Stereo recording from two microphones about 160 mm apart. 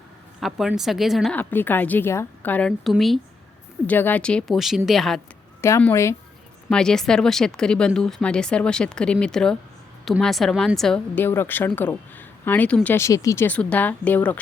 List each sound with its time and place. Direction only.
0.3 s speech: centre (ahead or behind)
3.8 s speech: 10° left (ahead or behind)
5.6 s a woman's voice: 15° left (ahead or behind)
6.7 s a woman's voice: 5° left (ahead or behind)